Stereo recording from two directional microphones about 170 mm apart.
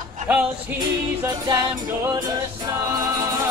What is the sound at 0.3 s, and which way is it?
A capella, 5° right (ahead or behind).